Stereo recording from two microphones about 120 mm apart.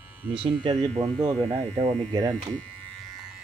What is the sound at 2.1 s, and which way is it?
Speech, 30° right (ahead or behind).